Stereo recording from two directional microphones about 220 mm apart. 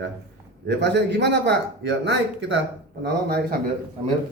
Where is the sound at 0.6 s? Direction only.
50° right (ahead or behind).